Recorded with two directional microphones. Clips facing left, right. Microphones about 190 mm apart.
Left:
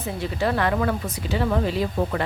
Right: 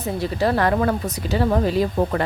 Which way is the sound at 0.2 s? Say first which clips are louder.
Right 3 dB; 40° right (ahead or behind).